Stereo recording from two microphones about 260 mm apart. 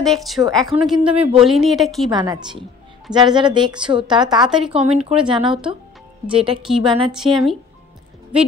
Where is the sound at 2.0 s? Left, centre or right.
Centre.